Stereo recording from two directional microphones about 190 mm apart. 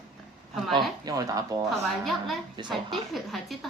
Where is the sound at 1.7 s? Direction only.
Centre (ahead or behind).